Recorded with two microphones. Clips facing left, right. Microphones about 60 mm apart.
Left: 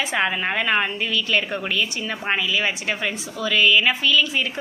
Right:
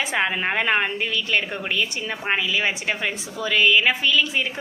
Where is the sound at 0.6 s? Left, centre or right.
Right.